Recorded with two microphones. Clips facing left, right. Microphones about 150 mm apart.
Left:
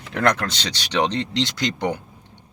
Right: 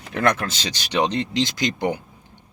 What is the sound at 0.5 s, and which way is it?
Speech, 70° left (ahead or behind).